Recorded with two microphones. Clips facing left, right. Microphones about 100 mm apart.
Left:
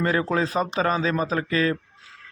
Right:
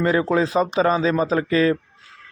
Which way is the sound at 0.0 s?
20° right (ahead or behind).